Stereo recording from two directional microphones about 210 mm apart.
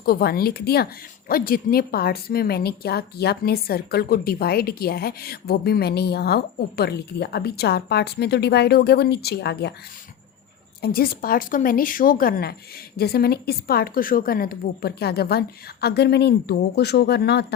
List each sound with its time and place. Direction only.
0.0 s a woman's voice: 45° left (ahead or behind)
10.8 s a woman's voice: 45° left (ahead or behind)